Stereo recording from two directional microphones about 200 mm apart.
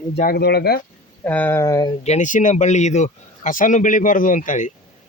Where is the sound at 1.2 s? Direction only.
10° left (ahead or behind).